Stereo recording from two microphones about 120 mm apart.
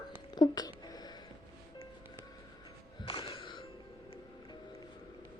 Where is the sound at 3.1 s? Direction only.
50° left (ahead or behind).